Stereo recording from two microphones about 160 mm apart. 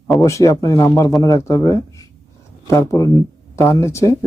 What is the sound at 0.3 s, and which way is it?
Speech, 20° left (ahead or behind).